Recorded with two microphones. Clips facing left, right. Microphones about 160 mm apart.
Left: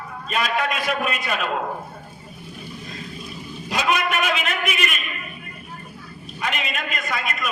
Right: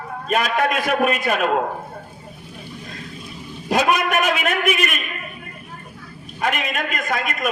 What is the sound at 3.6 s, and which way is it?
A man's voice, 50° right (ahead or behind).